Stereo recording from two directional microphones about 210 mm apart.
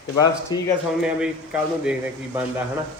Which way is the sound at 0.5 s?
20° left (ahead or behind).